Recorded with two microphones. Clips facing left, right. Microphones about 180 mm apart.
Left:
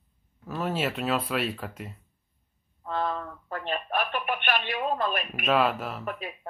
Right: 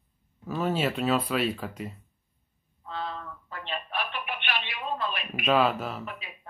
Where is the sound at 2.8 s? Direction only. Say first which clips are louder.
Left 6 dB; 50° left (ahead or behind).